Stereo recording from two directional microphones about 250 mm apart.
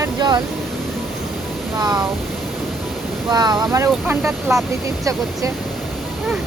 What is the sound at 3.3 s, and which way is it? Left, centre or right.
Speech, centre.